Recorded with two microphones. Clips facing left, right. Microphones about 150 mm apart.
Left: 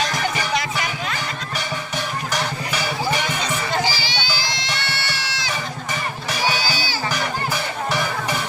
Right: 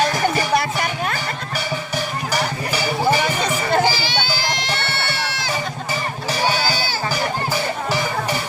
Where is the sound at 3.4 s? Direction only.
55° right (ahead or behind).